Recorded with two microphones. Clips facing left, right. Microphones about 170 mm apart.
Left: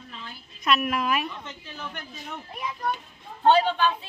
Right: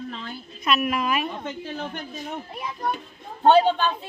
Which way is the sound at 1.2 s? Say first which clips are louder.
Right 6 dB; 50° right (ahead or behind).